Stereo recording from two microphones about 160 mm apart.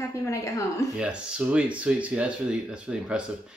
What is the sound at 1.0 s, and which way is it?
Speech, 5° right (ahead or behind).